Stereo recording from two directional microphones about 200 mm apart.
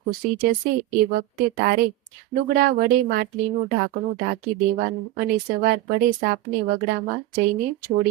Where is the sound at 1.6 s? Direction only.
50° right (ahead or behind).